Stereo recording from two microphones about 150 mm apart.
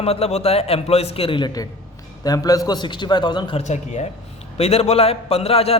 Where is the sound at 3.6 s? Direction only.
50° left (ahead or behind).